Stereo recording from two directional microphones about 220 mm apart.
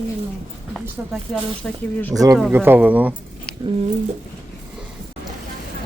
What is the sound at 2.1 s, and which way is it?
A man's voice, 15° right (ahead or behind).